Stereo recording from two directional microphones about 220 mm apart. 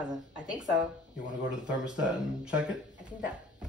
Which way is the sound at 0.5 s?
20° right (ahead or behind).